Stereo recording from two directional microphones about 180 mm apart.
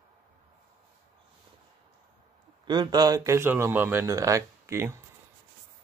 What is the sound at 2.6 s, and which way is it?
Speech, 25° right (ahead or behind).